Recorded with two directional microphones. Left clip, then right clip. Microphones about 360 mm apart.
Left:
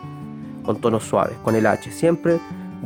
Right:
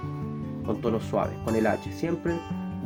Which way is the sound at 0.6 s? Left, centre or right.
Left.